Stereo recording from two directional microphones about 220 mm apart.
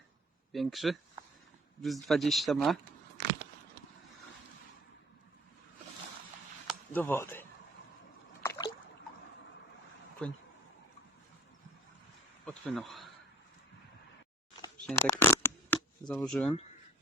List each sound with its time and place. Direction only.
0.5 s speech: centre (ahead or behind)
6.9 s speech: 10° left (ahead or behind)
8.4 s trickle: 15° left (ahead or behind)
10.2 s speech: 5° left (ahead or behind)
12.5 s speech: centre (ahead or behind)
14.8 s shuffling cards: 10° left (ahead or behind)